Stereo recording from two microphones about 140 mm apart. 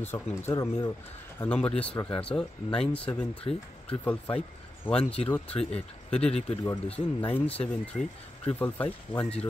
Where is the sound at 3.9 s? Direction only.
15° left (ahead or behind).